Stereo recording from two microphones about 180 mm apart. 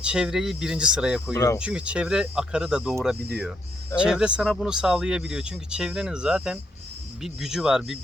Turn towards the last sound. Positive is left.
turn(degrees=0)  # may be behind; listen again after turning